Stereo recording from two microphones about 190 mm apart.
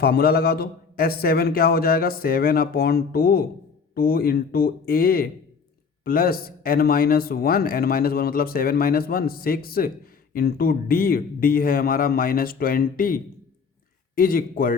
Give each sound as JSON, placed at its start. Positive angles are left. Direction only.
{"t": 0.0, "sound": "a man's voice", "side_deg": 55}